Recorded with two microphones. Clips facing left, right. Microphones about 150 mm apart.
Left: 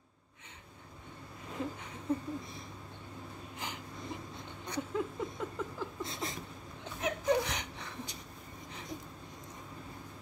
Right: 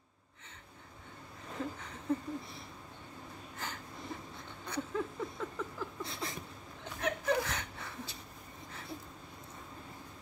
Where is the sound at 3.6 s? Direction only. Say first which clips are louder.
Even; 15° left (ahead or behind).